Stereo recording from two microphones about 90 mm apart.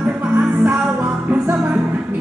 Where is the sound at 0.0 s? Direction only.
20° right (ahead or behind).